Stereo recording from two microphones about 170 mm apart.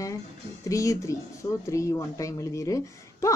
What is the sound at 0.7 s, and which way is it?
Speech, 20° left (ahead or behind).